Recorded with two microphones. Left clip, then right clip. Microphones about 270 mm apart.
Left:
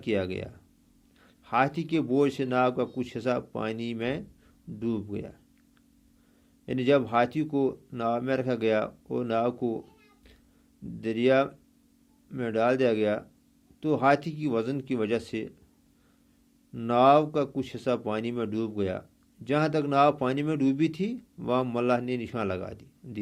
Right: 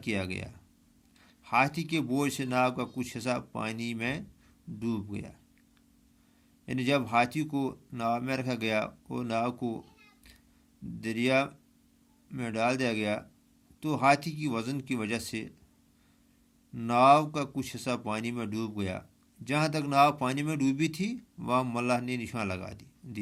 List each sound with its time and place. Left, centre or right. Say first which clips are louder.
0.0 s speech: left 5 dB; right
6.7 s speech: left 5 dB; right
11.0 s speech: left 4 dB; right
16.7 s speech: left 1 dB; right